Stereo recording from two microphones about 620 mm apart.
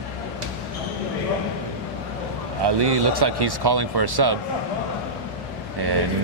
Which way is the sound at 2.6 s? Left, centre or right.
Right.